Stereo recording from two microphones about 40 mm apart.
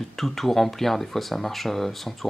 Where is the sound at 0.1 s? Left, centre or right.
Centre.